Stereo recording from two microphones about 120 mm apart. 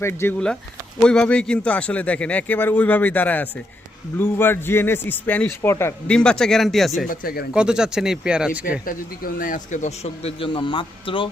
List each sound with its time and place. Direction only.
0.0 s a man's voice: 20° left (ahead or behind)
1.0 s a man's voice: 5° left (ahead or behind)
6.1 s speech: 5° left (ahead or behind)
9.7 s speech: 70° left (ahead or behind); by 11.3 s 45° left (ahead or behind)